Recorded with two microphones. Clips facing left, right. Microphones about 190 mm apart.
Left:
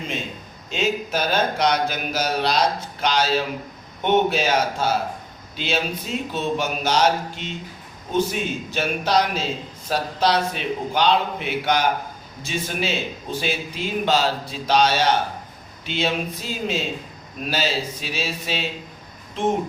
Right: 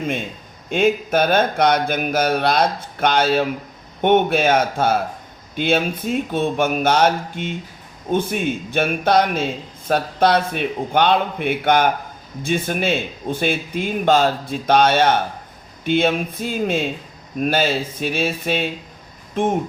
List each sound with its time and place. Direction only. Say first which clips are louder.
0.7 s a man's voice: right 6 dB; 55° right (ahead or behind)